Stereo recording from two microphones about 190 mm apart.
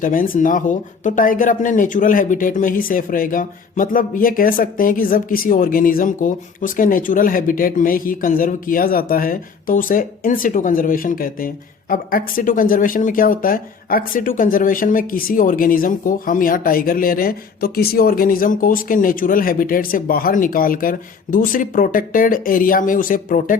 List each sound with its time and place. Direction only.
0.0 s speech: 45° left (ahead or behind)